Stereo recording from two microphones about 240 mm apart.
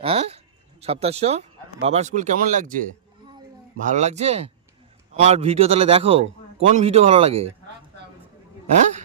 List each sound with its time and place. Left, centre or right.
0.0 s speech: right
3.8 s speech: right